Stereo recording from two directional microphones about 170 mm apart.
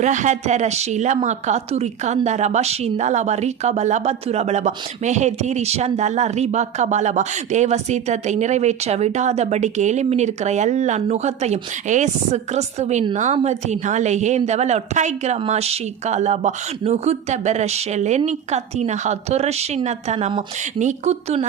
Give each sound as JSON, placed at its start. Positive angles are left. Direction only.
{"t": 0.0, "sound": "speech", "side_deg": -45}